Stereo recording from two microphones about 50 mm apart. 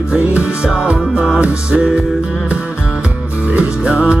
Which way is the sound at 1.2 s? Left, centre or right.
Centre.